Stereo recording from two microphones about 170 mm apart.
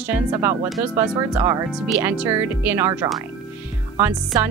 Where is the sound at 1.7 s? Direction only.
5° right (ahead or behind).